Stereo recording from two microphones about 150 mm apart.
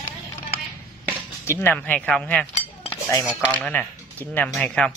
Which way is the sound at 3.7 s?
10° left (ahead or behind).